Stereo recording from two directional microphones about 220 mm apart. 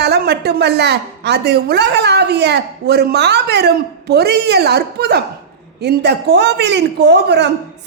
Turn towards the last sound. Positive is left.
turn(degrees=-50)  # may be behind; listen again after turning